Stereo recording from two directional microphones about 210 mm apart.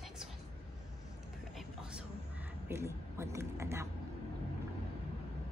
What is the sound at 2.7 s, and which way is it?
Speech, 10° right (ahead or behind).